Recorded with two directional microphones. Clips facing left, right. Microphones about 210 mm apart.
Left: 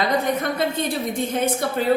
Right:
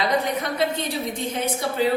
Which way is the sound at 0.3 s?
50° left (ahead or behind).